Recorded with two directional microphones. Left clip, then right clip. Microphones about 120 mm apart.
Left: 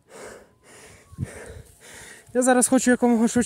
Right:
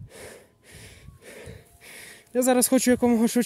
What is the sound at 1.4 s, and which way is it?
Speech, 10° right (ahead or behind).